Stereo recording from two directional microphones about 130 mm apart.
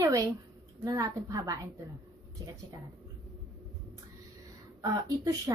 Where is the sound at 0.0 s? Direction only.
20° right (ahead or behind).